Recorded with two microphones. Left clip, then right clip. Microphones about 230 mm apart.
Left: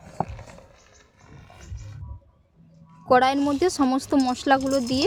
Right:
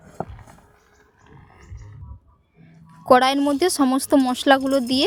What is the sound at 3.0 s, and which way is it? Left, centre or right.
Speech, right.